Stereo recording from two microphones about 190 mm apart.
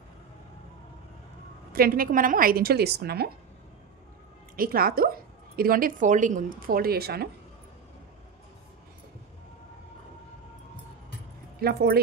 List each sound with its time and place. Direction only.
1.7 s speech: 50° right (ahead or behind)
4.6 s speech: 50° right (ahead or behind)
11.6 s speech: 55° right (ahead or behind)